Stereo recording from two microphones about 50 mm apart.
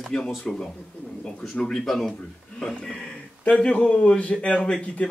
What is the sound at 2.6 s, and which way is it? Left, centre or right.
A man's voice, centre.